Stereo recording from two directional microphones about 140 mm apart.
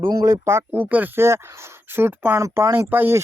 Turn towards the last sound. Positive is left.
turn(degrees=-15)  # may be behind; listen again after turning